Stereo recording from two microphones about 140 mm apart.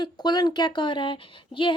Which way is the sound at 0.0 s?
30° left (ahead or behind).